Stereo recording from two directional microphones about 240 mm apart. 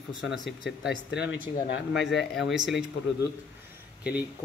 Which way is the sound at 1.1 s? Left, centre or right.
Left.